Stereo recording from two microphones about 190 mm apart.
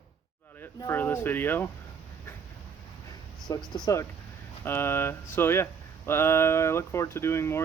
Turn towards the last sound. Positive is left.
turn(degrees=15)  # may be behind; listen again after turning